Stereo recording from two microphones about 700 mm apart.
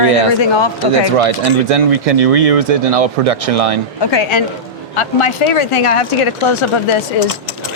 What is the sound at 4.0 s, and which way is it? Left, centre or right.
Speech, left.